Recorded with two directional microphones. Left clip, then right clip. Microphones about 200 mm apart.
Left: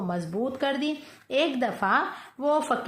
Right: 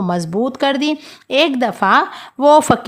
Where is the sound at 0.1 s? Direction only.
45° right (ahead or behind).